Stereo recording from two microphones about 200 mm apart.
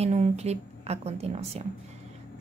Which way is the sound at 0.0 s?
35° right (ahead or behind).